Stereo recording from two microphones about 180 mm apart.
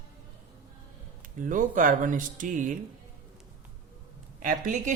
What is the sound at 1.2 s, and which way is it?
A man's voice, 45° right (ahead or behind).